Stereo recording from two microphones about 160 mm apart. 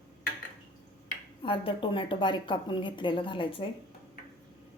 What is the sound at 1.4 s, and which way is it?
A woman's voice, 30° left (ahead or behind).